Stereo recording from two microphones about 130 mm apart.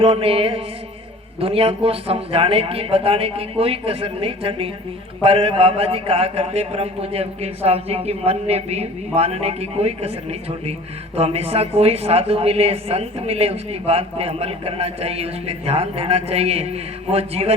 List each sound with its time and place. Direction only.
0.0 s a woman's voice: 45° right (ahead or behind)